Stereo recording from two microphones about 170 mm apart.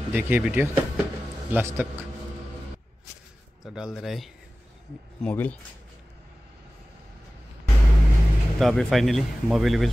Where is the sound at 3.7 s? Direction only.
Centre (ahead or behind).